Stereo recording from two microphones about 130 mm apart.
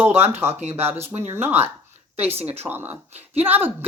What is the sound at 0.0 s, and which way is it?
Speech, 15° right (ahead or behind).